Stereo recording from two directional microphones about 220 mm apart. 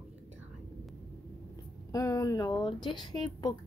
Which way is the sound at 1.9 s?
15° left (ahead or behind).